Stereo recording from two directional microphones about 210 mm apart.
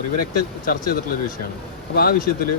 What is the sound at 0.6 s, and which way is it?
Speech, 45° left (ahead or behind).